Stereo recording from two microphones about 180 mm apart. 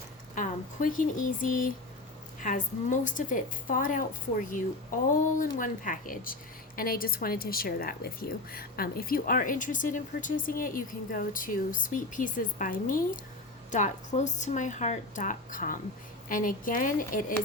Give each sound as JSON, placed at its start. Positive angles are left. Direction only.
{"t": 0.3, "sound": "a woman's voice", "side_deg": 45}
{"t": 5.1, "sound": "a woman's voice", "side_deg": 50}